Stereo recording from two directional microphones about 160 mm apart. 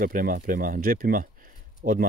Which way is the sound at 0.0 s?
60° right (ahead or behind).